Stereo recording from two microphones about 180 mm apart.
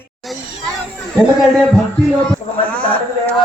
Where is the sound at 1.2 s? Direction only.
Centre (ahead or behind).